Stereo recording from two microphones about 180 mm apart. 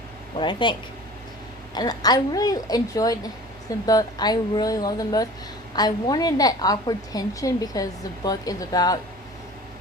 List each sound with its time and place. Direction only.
0.3 s a woman's voice: 25° left (ahead or behind)